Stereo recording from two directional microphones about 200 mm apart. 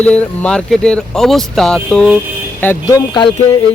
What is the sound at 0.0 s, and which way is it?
Speech, 5° left (ahead or behind).